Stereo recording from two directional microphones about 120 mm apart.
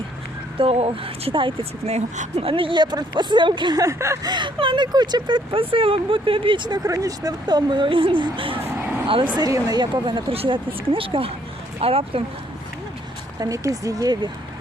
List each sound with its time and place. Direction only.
0.6 s speech: 50° right (ahead or behind)
1.9 s speech: 65° right (ahead or behind); by 4.3 s 25° right (ahead or behind)
4.3 s speech: 40° right (ahead or behind)
6.8 s speech: 30° right (ahead or behind); by 8.5 s 45° right (ahead or behind)
8.6 s a sound: 15° right (ahead or behind)
9.4 s speech: 30° right (ahead or behind); by 12.2 s 55° right (ahead or behind)
13.4 s speech: 30° right (ahead or behind)